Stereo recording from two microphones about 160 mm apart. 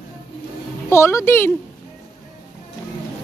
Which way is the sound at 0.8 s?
15° left (ahead or behind).